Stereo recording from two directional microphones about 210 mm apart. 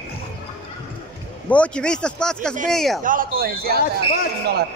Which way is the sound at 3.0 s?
40° right (ahead or behind).